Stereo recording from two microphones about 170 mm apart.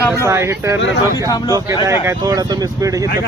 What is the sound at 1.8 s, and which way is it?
Speech, 20° right (ahead or behind).